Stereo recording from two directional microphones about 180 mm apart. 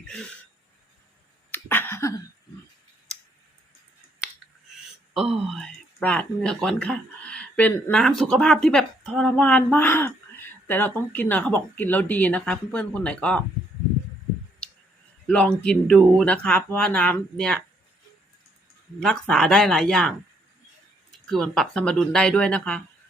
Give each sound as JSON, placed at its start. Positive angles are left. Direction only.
{"t": 1.5, "sound": "a sound", "side_deg": 10}
{"t": 5.1, "sound": "speech", "side_deg": 0}
{"t": 15.3, "sound": "speech", "side_deg": 5}
{"t": 18.9, "sound": "speech", "side_deg": 5}
{"t": 21.2, "sound": "speech", "side_deg": 5}